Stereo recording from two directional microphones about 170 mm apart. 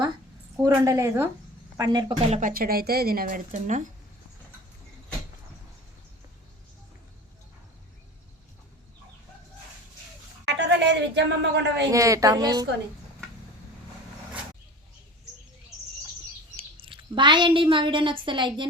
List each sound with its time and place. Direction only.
0.6 s a woman's voice: 15° right (ahead or behind)
2.3 s speech: 55° right (ahead or behind)
10.4 s a sound: 85° right
11.9 s a woman's voice: 20° right (ahead or behind)
16.6 s speech: 30° right (ahead or behind)